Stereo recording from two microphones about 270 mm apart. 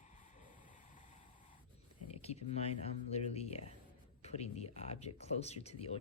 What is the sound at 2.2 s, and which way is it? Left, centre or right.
Speech, left.